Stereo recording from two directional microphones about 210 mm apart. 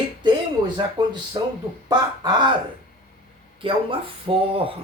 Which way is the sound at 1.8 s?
20° right (ahead or behind).